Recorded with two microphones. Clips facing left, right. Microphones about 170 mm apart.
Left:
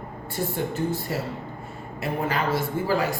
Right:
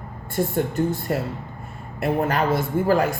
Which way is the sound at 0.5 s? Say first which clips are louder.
Right 3 dB; 55° right (ahead or behind).